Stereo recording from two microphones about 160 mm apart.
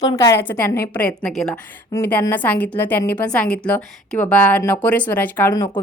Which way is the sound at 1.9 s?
15° left (ahead or behind).